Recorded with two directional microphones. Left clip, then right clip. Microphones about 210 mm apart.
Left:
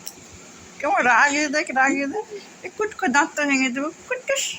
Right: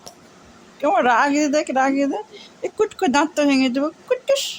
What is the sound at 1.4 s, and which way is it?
Speech, 30° right (ahead or behind).